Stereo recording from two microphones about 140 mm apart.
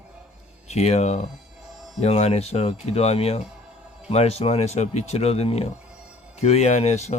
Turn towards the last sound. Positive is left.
turn(degrees=50)  # may be behind; listen again after turning